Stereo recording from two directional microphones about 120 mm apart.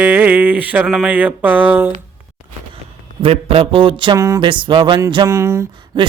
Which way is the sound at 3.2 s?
50° right (ahead or behind).